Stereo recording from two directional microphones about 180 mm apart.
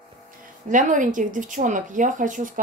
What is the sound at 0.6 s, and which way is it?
Speech, 45° right (ahead or behind).